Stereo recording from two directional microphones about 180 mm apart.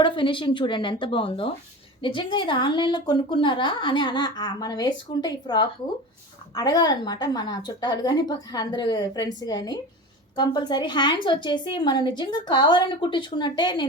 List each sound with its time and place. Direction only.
0.0 s a woman's voice: 25° left (ahead or behind)